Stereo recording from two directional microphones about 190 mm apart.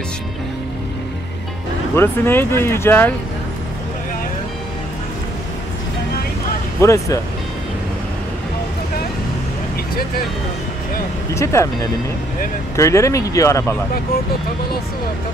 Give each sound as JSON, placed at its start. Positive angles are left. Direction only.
{"t": 2.0, "sound": "speech", "side_deg": 10}
{"t": 6.8, "sound": "speech", "side_deg": 15}
{"t": 11.3, "sound": "speech", "side_deg": 15}
{"t": 12.7, "sound": "speech", "side_deg": 15}